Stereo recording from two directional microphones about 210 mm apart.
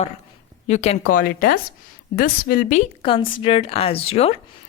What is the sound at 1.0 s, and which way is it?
A woman's voice, 40° left (ahead or behind).